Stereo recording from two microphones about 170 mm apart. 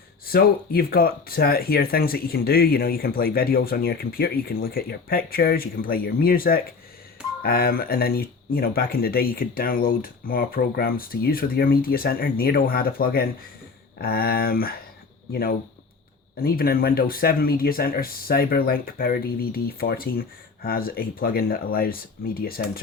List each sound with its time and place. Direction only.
0.3 s speech: 60° left (ahead or behind)